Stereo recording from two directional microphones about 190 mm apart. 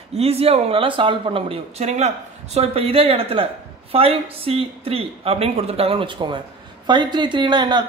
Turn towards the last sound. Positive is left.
turn(degrees=-25)  # may be behind; listen again after turning